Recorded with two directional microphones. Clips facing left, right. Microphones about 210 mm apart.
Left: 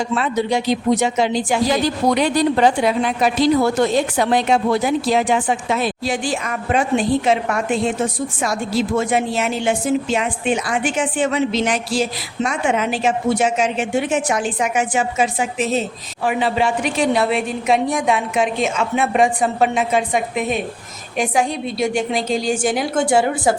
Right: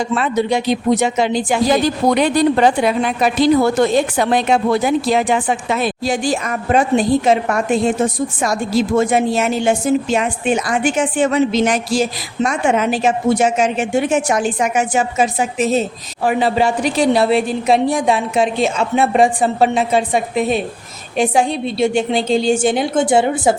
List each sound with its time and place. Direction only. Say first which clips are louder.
0.2 s speech: right 2 dB; 55° right (ahead or behind)
6.2 s a woman's voice: right 4 dB; 40° right (ahead or behind); by 23.6 s 20° right (ahead or behind)